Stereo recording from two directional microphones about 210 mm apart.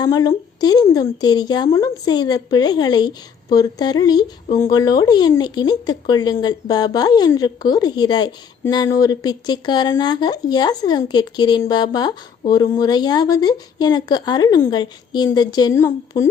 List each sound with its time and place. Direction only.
0.0 s a woman's voice: 20° left (ahead or behind)